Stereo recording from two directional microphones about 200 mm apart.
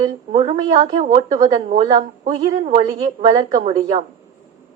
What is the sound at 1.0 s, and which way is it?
A woman's voice, 40° right (ahead or behind).